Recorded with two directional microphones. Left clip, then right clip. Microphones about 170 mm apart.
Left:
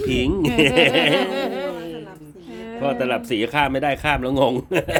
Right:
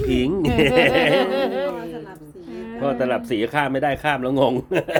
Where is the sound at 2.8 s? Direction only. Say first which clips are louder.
Even; 10° left (ahead or behind).